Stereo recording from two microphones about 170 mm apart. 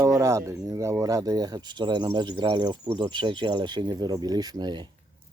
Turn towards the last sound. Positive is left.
turn(degrees=-25)  # may be behind; listen again after turning